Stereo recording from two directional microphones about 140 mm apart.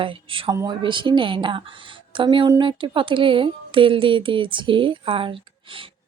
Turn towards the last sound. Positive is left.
turn(degrees=-40)  # may be behind; listen again after turning